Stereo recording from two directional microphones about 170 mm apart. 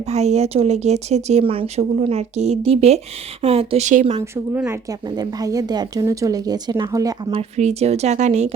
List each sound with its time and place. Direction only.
0.0 s speech: 40° right (ahead or behind)
4.5 s speech: 10° right (ahead or behind)
4.9 s speech: 25° right (ahead or behind)
7.3 s speech: 40° right (ahead or behind)